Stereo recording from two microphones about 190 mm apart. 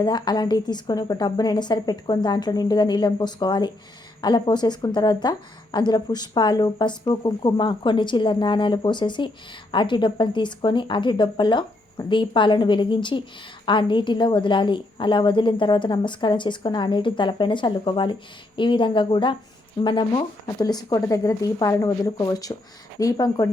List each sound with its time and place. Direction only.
0.0 s a woman's voice: 20° left (ahead or behind)